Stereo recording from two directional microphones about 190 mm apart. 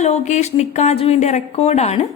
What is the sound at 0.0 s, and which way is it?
A woman's voice, 35° left (ahead or behind).